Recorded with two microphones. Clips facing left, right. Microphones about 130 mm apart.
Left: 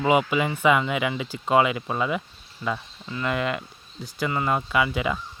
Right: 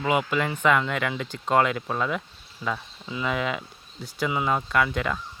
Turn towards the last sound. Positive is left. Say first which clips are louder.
# left 1 dB
turn(degrees=5)  # may be behind; listen again after turning